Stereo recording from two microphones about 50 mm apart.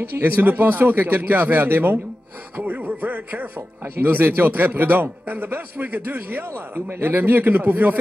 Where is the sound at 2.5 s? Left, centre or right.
Right.